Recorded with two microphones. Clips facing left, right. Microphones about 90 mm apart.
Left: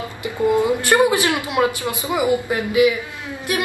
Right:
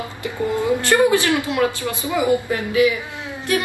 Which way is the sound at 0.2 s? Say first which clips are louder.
Left 4 dB; 20° left (ahead or behind).